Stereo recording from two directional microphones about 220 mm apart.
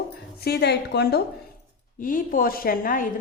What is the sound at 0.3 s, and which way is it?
Speech, 45° left (ahead or behind).